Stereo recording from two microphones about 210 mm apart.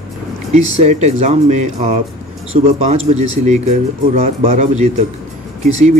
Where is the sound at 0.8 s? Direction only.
30° right (ahead or behind).